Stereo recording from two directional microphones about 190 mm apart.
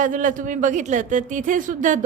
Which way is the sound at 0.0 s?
45° right (ahead or behind).